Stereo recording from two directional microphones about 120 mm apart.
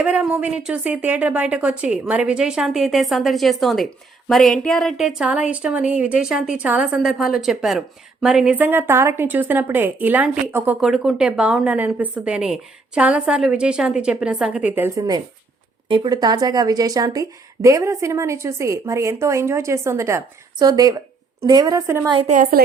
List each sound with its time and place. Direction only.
0.0 s a woman's voice: 10° right (ahead or behind)
14.8 s a woman's voice: 30° right (ahead or behind)